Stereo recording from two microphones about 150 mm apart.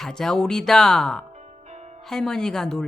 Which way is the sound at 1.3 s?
50° right (ahead or behind).